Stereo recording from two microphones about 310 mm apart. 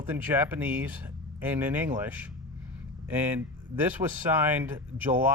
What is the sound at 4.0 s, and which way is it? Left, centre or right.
Speech, centre.